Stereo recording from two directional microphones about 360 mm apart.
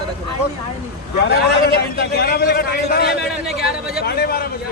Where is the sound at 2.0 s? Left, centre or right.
Left.